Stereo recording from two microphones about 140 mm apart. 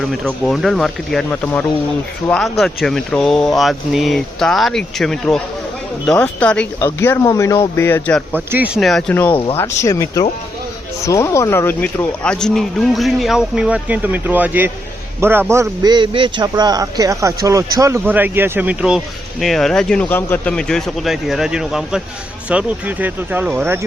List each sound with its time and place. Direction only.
0.0 s speech: 5° left (ahead or behind)
6.7 s speech: 20° left (ahead or behind)
8.5 s a man's voice: 10° right (ahead or behind)
8.8 s speech: 5° left (ahead or behind)
9.6 s a man's voice: 20° left (ahead or behind); by 23.8 s 15° right (ahead or behind)